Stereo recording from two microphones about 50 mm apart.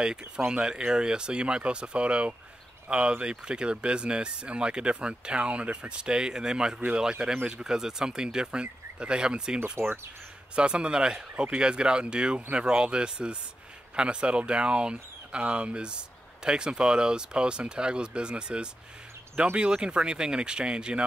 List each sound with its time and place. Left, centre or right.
0.0 s speech: centre
9.8 s speech: right
10.5 s speech: right